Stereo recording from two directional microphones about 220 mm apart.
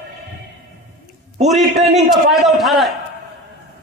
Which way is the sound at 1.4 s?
Centre (ahead or behind).